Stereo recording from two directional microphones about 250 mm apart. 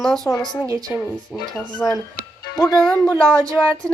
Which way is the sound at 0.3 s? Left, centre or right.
Centre.